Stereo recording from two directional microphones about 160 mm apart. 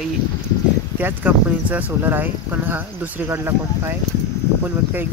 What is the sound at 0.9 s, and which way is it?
Speech, 10° right (ahead or behind).